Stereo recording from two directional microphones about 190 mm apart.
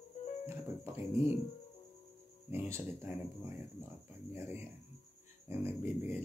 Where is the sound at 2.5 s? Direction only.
15° right (ahead or behind).